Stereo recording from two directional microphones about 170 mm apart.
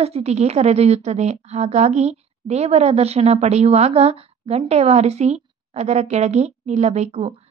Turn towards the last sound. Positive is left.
turn(degrees=-40)  # may be behind; listen again after turning